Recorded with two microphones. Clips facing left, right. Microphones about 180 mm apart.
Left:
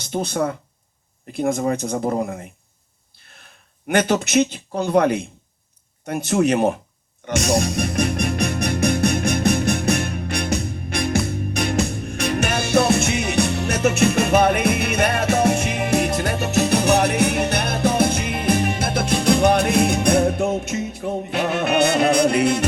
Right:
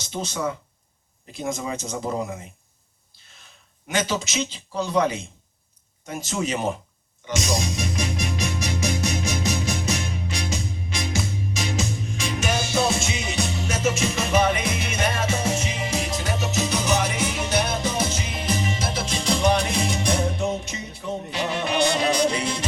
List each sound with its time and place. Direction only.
0.0 s a man's voice: 55° left (ahead or behind)
3.8 s a man's voice: 60° left (ahead or behind)
7.3 s music: 60° left (ahead or behind)